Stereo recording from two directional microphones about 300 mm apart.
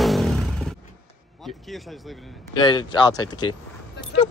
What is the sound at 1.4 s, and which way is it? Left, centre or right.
Speech, centre.